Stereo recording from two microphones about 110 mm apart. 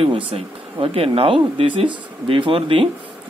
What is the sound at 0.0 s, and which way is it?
Speech, 55° right (ahead or behind).